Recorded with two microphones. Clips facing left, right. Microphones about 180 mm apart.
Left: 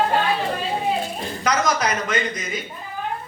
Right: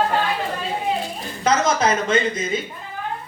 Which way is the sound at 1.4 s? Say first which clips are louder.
Right 3 dB; 25° right (ahead or behind).